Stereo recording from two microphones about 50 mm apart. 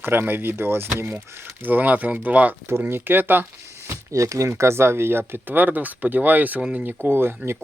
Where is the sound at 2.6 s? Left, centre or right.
Right.